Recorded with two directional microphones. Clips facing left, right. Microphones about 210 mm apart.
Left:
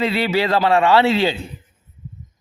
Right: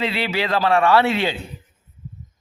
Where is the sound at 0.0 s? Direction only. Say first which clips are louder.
Left 4 dB; 40° left (ahead or behind).